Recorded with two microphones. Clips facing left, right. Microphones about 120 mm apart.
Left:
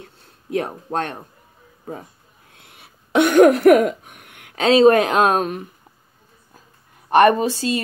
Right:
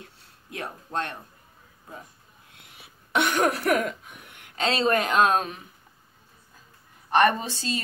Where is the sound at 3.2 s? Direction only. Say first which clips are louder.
Left 11 dB; 50° left (ahead or behind).